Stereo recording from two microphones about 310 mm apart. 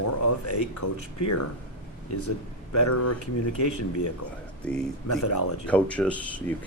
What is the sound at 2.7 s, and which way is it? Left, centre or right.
Speech, left.